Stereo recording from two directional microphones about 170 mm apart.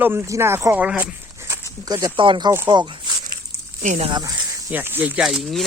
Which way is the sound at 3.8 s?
45° right (ahead or behind).